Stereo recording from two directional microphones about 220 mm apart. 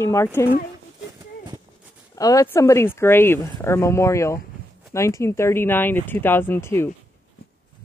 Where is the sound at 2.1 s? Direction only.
15° left (ahead or behind).